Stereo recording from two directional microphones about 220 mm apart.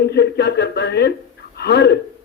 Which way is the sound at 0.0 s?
50° left (ahead or behind).